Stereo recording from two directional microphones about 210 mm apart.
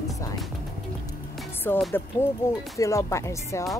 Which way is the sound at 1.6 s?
10° left (ahead or behind).